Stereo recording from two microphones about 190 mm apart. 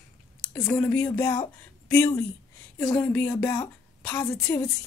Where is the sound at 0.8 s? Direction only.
10° left (ahead or behind).